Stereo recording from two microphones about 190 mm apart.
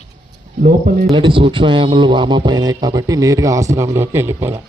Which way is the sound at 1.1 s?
25° right (ahead or behind).